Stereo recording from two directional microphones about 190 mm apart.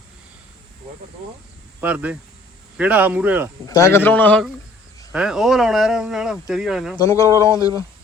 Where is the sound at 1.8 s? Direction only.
10° right (ahead or behind).